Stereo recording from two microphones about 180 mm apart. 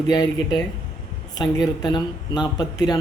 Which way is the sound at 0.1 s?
25° left (ahead or behind).